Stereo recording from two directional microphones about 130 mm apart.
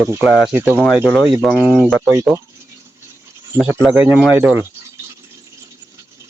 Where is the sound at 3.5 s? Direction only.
20° right (ahead or behind).